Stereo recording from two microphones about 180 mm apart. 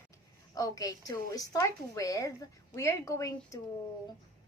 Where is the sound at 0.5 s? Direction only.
20° left (ahead or behind).